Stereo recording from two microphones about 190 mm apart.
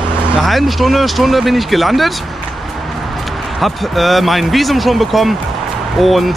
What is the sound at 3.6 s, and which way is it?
Speech, centre (ahead or behind).